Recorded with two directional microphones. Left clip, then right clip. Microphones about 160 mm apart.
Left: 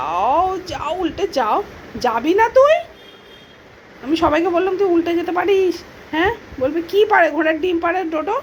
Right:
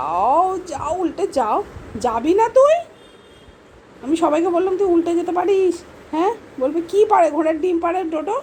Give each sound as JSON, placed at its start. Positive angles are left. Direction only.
{"t": 0.0, "sound": "speech", "side_deg": -15}
{"t": 4.0, "sound": "a woman's voice", "side_deg": -15}